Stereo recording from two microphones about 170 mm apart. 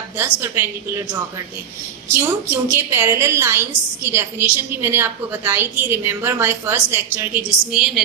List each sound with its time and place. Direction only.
0.2 s a woman's voice: 15° right (ahead or behind)